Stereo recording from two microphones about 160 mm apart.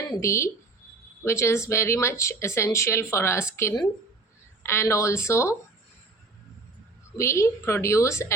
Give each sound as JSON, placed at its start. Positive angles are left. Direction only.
{"t": 0.1, "sound": "speech", "side_deg": 20}
{"t": 7.2, "sound": "speech", "side_deg": 20}